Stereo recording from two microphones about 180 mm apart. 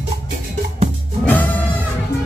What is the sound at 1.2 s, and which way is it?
Music, 10° left (ahead or behind).